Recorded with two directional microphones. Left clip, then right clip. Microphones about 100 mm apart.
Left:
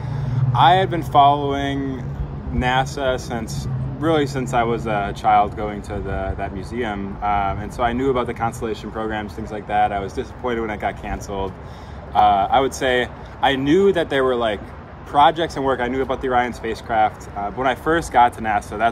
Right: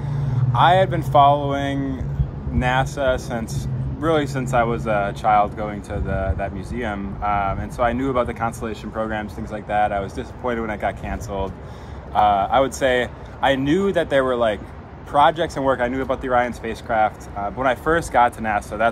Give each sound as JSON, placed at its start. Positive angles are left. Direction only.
{"t": 0.1, "sound": "speech", "side_deg": -55}